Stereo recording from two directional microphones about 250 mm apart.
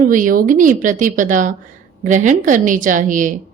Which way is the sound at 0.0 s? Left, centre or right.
Right.